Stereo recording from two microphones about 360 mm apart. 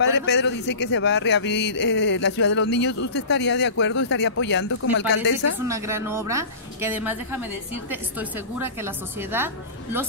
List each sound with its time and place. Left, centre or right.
0.0 s speech: left
5.6 s a woman's voice: centre